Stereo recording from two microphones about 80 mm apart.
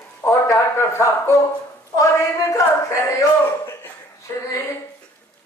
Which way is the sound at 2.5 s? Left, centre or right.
Left.